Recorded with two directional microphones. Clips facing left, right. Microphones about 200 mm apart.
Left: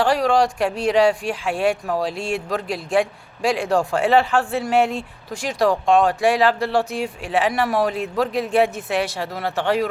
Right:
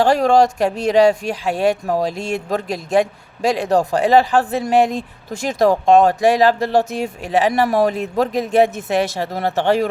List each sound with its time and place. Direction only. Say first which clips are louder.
0.0 s speech: right 4 dB; 45° right (ahead or behind)
4.5 s speech: right 2 dB; 15° right (ahead or behind)
5.4 s speech: right 4 dB; 45° right (ahead or behind)